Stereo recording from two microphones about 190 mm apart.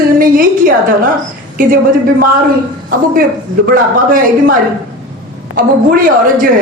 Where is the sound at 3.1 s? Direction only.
45° right (ahead or behind).